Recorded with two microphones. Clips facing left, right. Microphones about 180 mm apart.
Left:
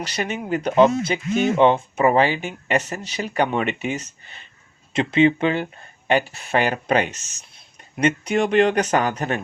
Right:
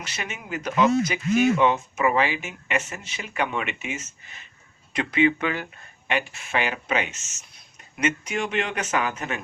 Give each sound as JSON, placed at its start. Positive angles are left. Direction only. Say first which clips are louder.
{"t": 0.0, "sound": "speech", "louder": "left 9 dB", "side_deg": 35}